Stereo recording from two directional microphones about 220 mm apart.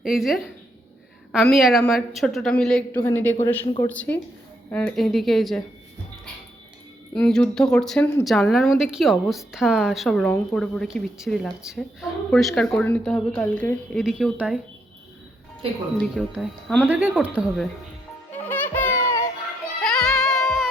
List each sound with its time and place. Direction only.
0.0 s a woman's voice: centre (ahead or behind)
7.1 s a woman's voice: 5° left (ahead or behind)
16.0 s a woman's voice: centre (ahead or behind)
18.3 s music: 10° left (ahead or behind)
19.8 s music: centre (ahead or behind)